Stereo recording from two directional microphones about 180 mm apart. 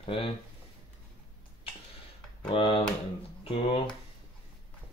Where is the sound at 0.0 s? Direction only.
30° left (ahead or behind).